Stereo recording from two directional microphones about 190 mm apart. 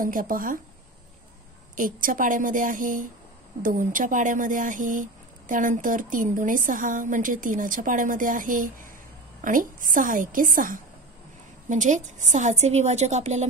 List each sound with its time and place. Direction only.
0.0 s speech: 45° right (ahead or behind)
1.8 s a woman's voice: 45° right (ahead or behind)